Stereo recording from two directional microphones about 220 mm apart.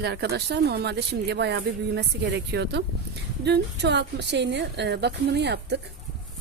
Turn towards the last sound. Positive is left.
turn(degrees=-50)  # may be behind; listen again after turning